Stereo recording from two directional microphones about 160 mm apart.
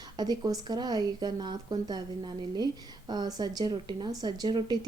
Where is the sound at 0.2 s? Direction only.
25° right (ahead or behind).